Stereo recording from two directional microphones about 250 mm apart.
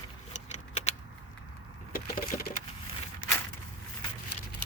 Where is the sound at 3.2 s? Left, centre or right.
Left.